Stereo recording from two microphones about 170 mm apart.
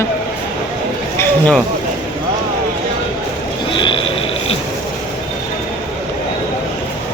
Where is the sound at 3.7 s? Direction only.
30° left (ahead or behind).